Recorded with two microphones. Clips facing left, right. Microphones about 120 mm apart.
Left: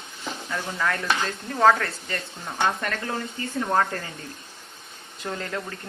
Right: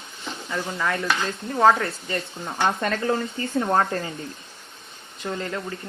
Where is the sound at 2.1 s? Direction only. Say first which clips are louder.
Right 1 dB; 25° right (ahead or behind).